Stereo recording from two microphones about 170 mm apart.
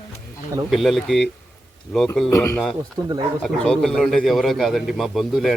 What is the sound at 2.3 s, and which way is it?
Speech, 15° left (ahead or behind).